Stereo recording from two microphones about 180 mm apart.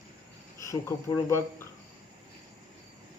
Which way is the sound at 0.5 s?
15° left (ahead or behind).